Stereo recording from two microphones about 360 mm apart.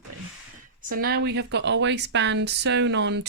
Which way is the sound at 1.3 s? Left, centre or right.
Right.